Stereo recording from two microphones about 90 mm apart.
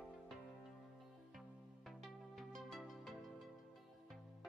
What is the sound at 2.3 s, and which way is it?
Music, centre (ahead or behind).